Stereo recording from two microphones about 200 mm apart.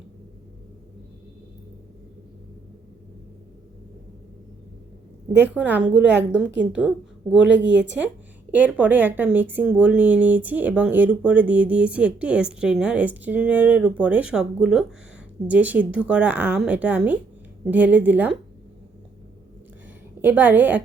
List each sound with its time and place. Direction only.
5.5 s a woman's voice: 5° right (ahead or behind)
7.5 s speech: 60° right (ahead or behind)
8.5 s speech: 10° right (ahead or behind)
20.2 s speech: 10° right (ahead or behind)